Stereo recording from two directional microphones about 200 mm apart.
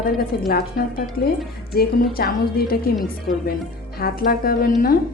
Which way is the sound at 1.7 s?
50° left (ahead or behind).